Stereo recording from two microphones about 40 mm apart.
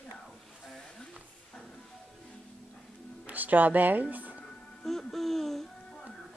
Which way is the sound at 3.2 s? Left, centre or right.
Right.